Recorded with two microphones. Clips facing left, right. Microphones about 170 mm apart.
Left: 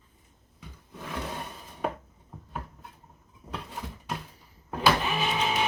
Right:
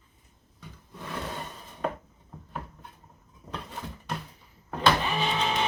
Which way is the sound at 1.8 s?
10° left (ahead or behind).